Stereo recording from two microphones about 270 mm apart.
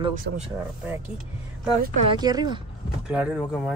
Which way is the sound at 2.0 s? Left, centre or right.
Centre.